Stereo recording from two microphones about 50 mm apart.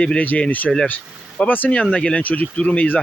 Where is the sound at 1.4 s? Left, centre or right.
Left.